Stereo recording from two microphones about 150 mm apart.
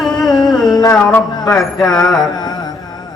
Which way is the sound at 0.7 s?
25° left (ahead or behind).